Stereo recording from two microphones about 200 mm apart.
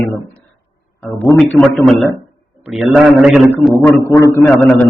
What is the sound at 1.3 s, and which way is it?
A man's voice, 5° left (ahead or behind).